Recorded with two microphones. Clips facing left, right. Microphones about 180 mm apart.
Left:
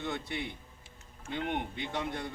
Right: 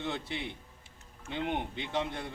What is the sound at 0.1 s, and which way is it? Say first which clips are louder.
Speech: even; 25° right (ahead or behind).